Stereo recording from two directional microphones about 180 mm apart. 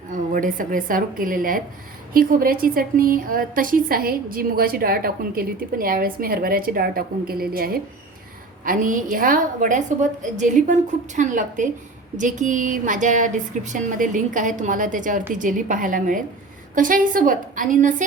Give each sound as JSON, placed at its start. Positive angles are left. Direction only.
{"t": 0.1, "sound": "a woman's voice", "side_deg": -50}